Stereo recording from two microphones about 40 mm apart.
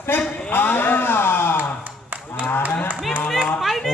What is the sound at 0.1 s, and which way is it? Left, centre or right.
Speech, left.